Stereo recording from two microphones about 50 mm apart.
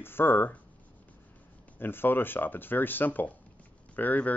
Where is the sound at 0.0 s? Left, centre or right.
Left.